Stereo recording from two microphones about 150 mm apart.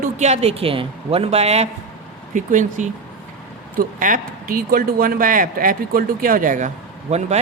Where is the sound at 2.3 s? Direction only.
55° right (ahead or behind).